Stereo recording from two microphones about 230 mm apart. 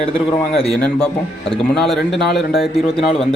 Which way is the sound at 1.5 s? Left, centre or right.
Centre.